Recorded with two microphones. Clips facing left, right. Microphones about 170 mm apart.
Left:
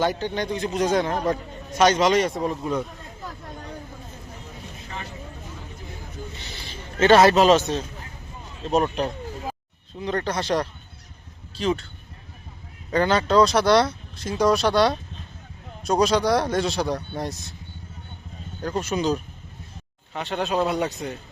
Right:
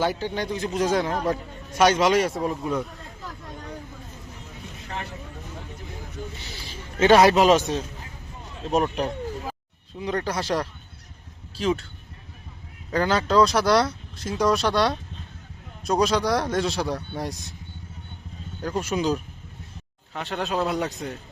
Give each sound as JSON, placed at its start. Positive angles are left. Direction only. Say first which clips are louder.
{"t": 0.0, "sound": "a man's voice", "louder": "left 1 dB", "side_deg": -5}
{"t": 6.4, "sound": "a sound", "louder": "left 1 dB", "side_deg": -5}
{"t": 8.6, "sound": "a man's voice", "louder": "left 1 dB", "side_deg": -10}
{"t": 12.9, "sound": "speech", "louder": "left 2 dB", "side_deg": 0}
{"t": 18.6, "sound": "a man's voice", "louder": "left 1 dB", "side_deg": -10}